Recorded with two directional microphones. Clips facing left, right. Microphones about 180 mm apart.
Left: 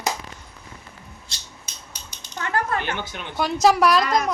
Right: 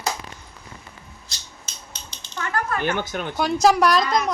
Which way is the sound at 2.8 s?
45° right (ahead or behind).